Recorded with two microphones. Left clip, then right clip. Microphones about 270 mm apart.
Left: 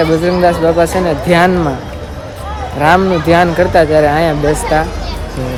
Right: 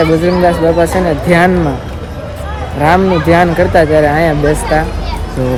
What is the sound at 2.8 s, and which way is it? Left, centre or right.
A man's voice, centre.